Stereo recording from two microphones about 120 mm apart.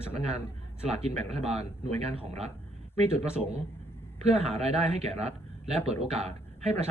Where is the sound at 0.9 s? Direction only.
60° right (ahead or behind).